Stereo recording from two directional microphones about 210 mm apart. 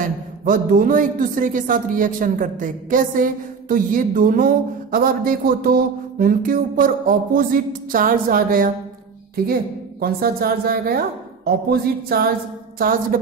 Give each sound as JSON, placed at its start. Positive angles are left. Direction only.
{"t": 0.0, "sound": "a man's voice", "side_deg": -40}